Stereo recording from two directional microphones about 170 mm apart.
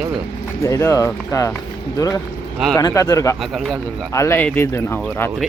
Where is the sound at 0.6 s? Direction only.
15° left (ahead or behind).